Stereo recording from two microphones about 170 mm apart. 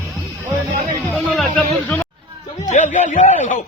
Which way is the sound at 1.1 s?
Centre (ahead or behind).